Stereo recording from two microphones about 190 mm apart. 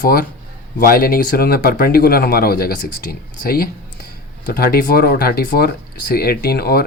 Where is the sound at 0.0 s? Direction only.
50° left (ahead or behind).